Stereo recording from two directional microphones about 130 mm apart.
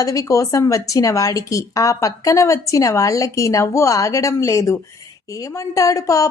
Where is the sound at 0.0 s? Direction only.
25° left (ahead or behind).